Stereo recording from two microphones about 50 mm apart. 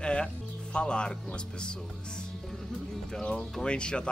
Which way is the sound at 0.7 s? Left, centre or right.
Centre.